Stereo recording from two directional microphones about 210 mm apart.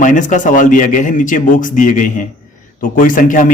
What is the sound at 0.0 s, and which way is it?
A man's voice, 35° left (ahead or behind).